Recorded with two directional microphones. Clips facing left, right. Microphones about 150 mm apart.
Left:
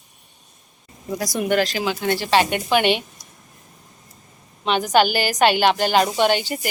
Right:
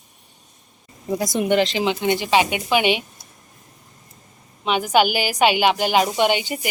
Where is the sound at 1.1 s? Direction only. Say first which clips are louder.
Right 2 dB; 20° right (ahead or behind).